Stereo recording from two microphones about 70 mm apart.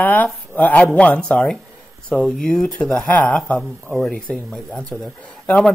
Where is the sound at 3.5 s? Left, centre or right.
Centre.